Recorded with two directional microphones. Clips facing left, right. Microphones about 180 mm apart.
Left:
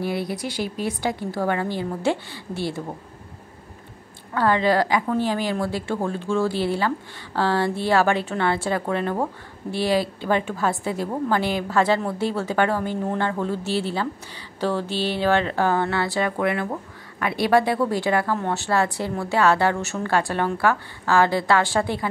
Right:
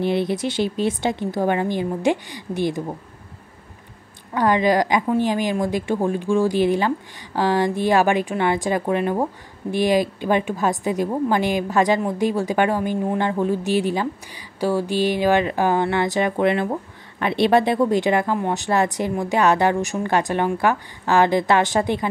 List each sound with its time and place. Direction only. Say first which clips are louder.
0.0 s a woman's voice: right 5 dB; 25° right (ahead or behind)
4.3 s a woman's voice: right 2 dB; 15° right (ahead or behind)